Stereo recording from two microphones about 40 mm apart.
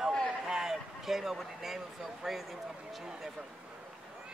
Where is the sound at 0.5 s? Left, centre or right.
Centre.